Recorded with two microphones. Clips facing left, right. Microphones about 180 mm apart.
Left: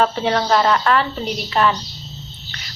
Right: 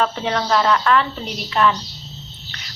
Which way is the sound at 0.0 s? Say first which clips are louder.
Left 3 dB; 35° left (ahead or behind).